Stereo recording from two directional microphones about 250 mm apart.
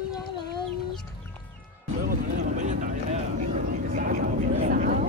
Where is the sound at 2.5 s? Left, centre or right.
Right.